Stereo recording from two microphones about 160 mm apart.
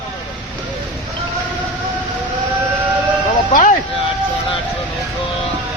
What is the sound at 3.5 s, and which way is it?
Music, 55° left (ahead or behind).